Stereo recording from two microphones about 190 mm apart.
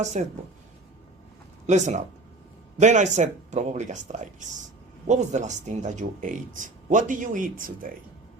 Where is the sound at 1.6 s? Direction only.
40° right (ahead or behind).